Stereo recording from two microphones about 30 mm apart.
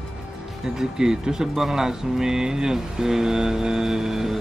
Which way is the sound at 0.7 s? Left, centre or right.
Centre.